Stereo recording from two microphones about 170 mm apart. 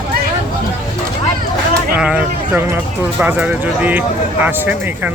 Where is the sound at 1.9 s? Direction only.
5° right (ahead or behind).